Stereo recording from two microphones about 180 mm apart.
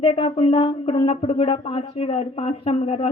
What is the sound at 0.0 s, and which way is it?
Speech, 30° left (ahead or behind).